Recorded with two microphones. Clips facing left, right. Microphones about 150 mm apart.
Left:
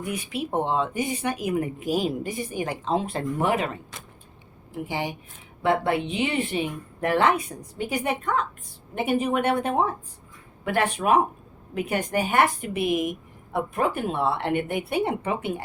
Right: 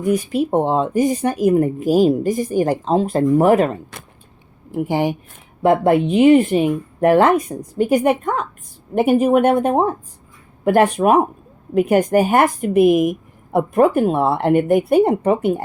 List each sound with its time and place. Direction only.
0.0 s a woman's voice: 40° right (ahead or behind)